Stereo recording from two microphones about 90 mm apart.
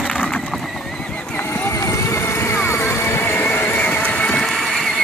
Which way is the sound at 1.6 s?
35° left (ahead or behind).